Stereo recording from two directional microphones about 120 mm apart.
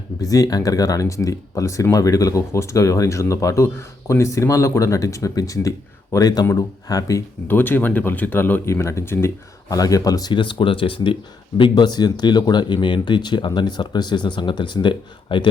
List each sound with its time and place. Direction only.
0.2 s speech: 30° left (ahead or behind)
7.4 s speech: 15° left (ahead or behind); by 15.4 s 40° left (ahead or behind)